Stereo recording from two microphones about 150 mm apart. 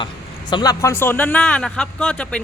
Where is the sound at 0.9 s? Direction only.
15° left (ahead or behind).